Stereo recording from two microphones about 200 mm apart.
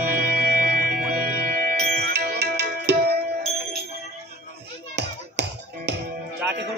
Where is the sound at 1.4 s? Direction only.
55° right (ahead or behind).